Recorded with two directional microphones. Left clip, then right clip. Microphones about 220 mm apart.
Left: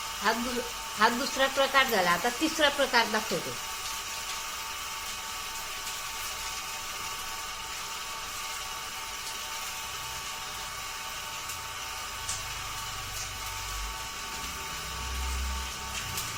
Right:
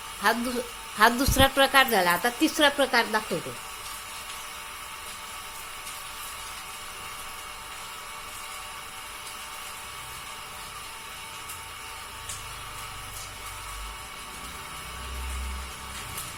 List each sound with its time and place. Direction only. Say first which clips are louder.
0.2 s speech: right 4 dB; 45° right (ahead or behind)